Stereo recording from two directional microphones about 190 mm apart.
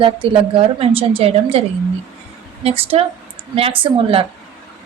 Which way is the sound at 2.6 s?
30° right (ahead or behind).